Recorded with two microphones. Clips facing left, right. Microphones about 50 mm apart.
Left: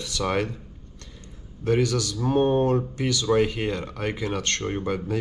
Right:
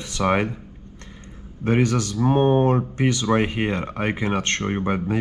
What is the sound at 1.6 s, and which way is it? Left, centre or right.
Speech, right.